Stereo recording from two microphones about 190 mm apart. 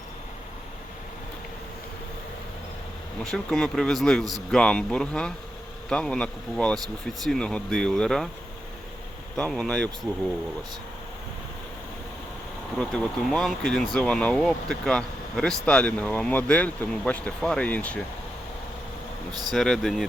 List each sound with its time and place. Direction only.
3.3 s speech: centre (ahead or behind)
9.4 s speech: 5° left (ahead or behind)
12.7 s speech: centre (ahead or behind)
19.3 s speech: 20° right (ahead or behind)
19.5 s speech: centre (ahead or behind)